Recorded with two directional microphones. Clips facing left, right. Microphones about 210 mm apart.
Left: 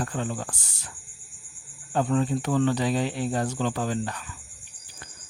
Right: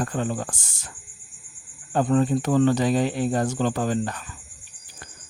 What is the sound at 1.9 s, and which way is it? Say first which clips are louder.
Speech: right 4 dB; 45° right (ahead or behind).